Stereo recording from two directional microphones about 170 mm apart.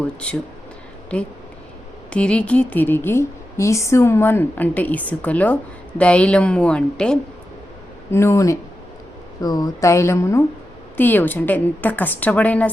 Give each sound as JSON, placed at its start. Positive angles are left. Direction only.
{"t": 2.0, "sound": "a woman's voice", "side_deg": 5}
{"t": 8.1, "sound": "a woman's voice", "side_deg": 15}